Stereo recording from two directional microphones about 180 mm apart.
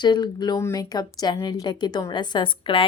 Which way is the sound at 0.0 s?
25° left (ahead or behind).